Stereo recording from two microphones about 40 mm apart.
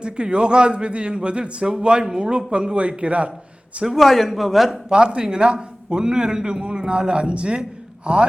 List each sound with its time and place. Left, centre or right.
0.0 s a man's voice: right
3.8 s a man's voice: centre
4.9 s a man's voice: right